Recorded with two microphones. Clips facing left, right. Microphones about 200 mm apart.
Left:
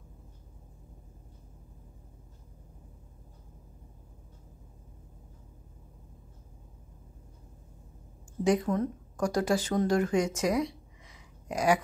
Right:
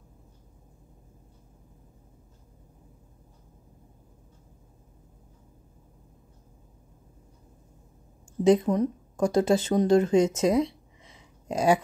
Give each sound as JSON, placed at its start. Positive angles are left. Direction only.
{"t": 8.5, "sound": "speech", "side_deg": -20}